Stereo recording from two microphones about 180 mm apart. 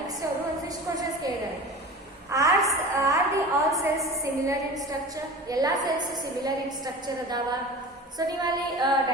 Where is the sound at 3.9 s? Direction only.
15° right (ahead or behind).